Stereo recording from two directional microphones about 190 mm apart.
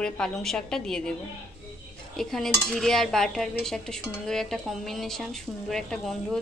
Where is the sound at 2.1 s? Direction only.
Centre (ahead or behind).